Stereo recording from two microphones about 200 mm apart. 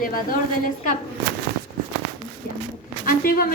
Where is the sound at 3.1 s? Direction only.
45° left (ahead or behind).